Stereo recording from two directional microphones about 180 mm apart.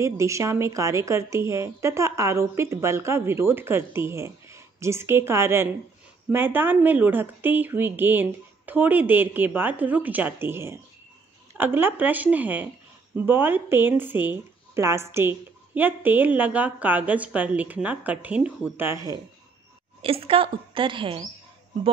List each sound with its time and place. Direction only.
0.0 s speech: 15° right (ahead or behind)
20.0 s speech: 30° right (ahead or behind)